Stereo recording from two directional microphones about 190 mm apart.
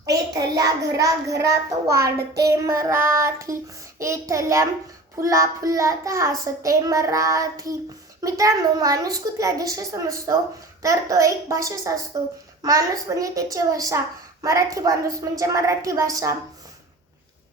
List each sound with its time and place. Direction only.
0.0 s a child's voice: 20° right (ahead or behind)